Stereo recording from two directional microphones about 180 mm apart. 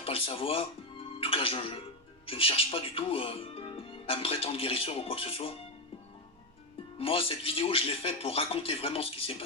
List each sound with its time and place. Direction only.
0.0 s speech: 30° left (ahead or behind)
1.0 s music: 30° left (ahead or behind)
2.2 s speech: 30° left (ahead or behind)
7.0 s speech: 30° left (ahead or behind)